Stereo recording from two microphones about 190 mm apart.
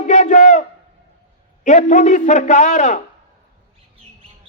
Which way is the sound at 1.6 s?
40° left (ahead or behind).